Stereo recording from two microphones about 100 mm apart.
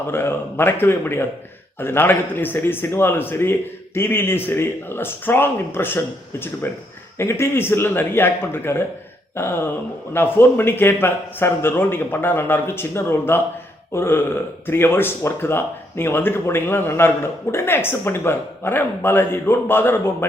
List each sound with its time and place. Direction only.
0.1 s a man's voice: 20° left (ahead or behind)